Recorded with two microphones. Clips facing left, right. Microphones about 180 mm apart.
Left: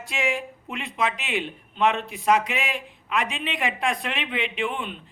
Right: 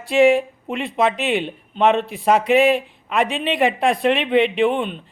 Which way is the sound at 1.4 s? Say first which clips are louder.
Right 3 dB; 30° right (ahead or behind).